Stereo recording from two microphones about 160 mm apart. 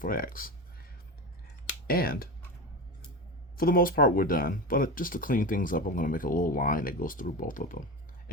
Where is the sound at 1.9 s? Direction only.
70° left (ahead or behind).